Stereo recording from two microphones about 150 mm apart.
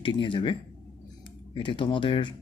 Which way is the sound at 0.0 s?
35° left (ahead or behind).